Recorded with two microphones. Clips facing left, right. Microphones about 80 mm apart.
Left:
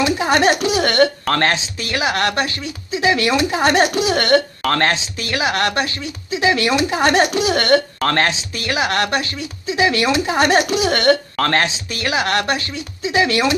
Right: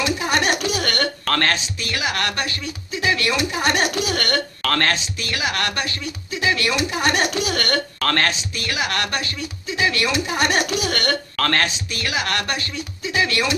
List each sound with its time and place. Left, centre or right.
0.0 s speech: left